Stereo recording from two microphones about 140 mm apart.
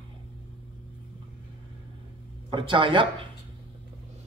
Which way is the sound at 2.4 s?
35° right (ahead or behind).